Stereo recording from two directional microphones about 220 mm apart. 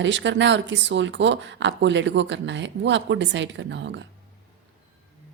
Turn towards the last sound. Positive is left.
turn(degrees=-55)  # may be behind; listen again after turning